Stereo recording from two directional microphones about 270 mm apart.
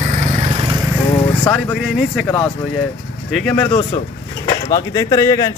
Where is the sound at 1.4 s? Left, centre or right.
Centre.